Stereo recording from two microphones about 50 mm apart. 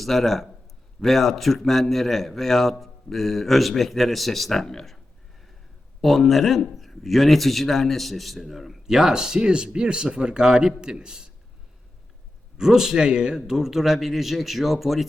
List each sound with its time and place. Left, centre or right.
0.0 s speech: centre
6.0 s speech: centre
12.5 s speech: centre